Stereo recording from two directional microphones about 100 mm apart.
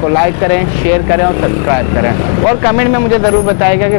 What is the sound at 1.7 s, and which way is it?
Speech, 20° left (ahead or behind).